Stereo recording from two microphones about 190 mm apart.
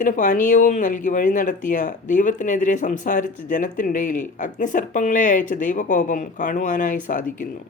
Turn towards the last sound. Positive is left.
turn(degrees=45)  # may be behind; listen again after turning